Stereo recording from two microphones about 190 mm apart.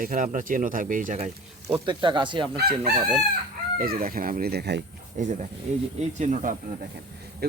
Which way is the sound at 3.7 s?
50° right (ahead or behind).